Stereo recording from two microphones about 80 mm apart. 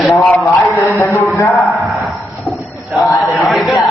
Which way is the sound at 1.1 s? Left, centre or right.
Left.